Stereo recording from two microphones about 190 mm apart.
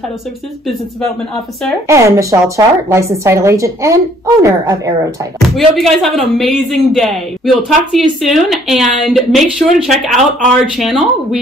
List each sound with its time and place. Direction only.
1.3 s a man's voice: 5° left (ahead or behind)
1.9 s a woman's voice: 15° right (ahead or behind)
5.8 s a man's voice: centre (ahead or behind)